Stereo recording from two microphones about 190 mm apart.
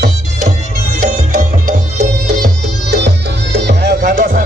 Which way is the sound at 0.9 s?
45° right (ahead or behind).